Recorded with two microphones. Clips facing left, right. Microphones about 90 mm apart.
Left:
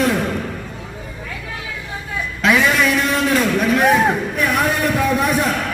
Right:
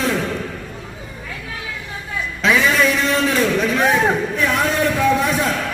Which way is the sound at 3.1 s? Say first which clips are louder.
Even; 10° left (ahead or behind).